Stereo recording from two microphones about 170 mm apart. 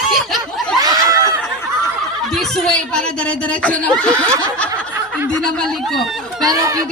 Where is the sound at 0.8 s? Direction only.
20° right (ahead or behind).